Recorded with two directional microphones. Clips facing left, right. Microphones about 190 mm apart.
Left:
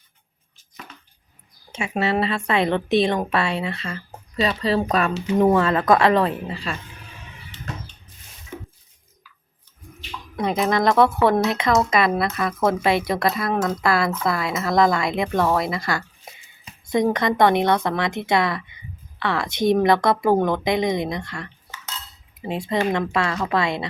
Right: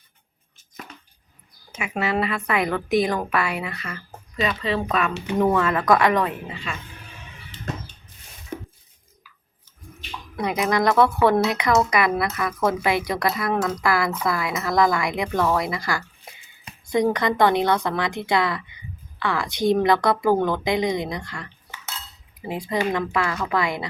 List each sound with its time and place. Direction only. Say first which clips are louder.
1.7 s a woman's voice: left 2 dB; 30° left (ahead or behind)
8.5 s dishes: right 3 dB; 40° right (ahead or behind)
10.3 s a sound: left 2 dB; 25° left (ahead or behind)
10.7 s a woman's voice: left 1 dB; 25° left (ahead or behind)